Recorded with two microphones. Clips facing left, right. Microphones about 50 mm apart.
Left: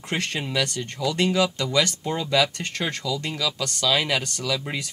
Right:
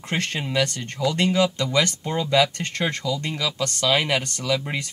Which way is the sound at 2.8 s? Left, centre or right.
Right.